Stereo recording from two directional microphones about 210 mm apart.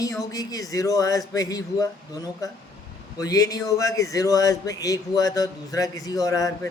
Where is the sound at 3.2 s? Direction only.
15° left (ahead or behind).